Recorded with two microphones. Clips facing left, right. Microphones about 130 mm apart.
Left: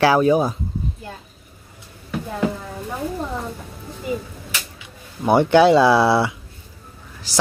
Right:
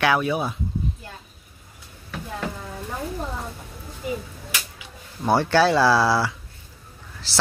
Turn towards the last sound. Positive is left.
turn(degrees=15)  # may be behind; listen again after turning